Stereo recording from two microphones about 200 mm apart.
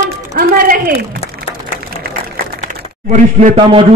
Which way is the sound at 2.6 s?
40° right (ahead or behind).